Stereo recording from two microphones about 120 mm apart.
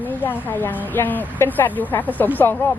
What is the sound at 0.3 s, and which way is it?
A woman's voice, 15° left (ahead or behind).